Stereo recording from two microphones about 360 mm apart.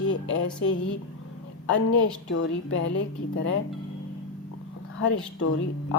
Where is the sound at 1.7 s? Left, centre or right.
Left.